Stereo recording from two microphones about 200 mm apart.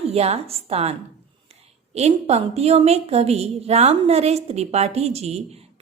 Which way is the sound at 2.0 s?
30° right (ahead or behind).